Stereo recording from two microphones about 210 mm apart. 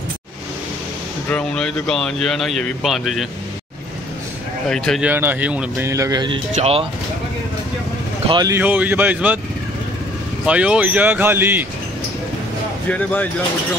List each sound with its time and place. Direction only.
1.3 s speech: 5° left (ahead or behind)
4.6 s speech: 5° left (ahead or behind)
5.1 s speech: 10° right (ahead or behind); by 6.9 s 30° right (ahead or behind)
8.3 s speech: 15° right (ahead or behind)
10.4 s speech: 5° right (ahead or behind)
12.9 s speech: 5° left (ahead or behind)